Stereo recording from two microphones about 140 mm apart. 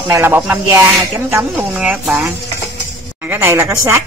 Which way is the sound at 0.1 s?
15° right (ahead or behind).